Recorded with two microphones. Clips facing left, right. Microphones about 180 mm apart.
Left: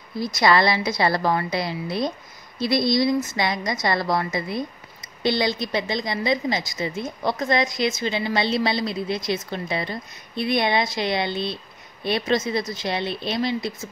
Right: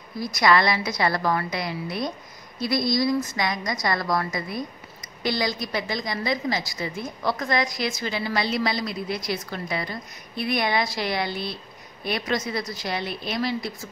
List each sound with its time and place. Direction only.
0.2 s a woman's voice: 25° left (ahead or behind)